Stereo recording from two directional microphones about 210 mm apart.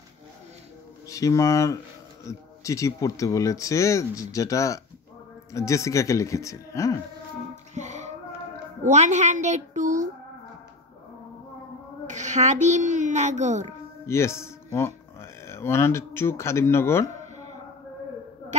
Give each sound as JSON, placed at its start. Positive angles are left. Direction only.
{"t": 1.0, "sound": "speech", "side_deg": 15}
{"t": 7.7, "sound": "music", "side_deg": -35}
{"t": 8.8, "sound": "a child's voice", "side_deg": -35}
{"t": 12.1, "sound": "a child's voice", "side_deg": -35}
{"t": 13.7, "sound": "speech", "side_deg": 15}